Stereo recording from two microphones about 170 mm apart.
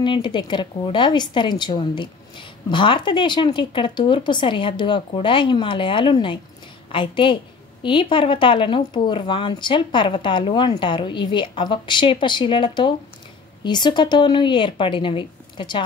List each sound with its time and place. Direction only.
0.0 s speech: 25° left (ahead or behind)